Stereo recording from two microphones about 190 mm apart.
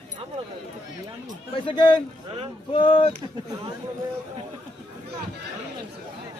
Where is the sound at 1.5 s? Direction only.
25° left (ahead or behind).